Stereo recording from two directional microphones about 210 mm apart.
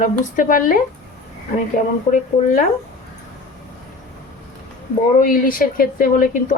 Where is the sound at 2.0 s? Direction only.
40° left (ahead or behind).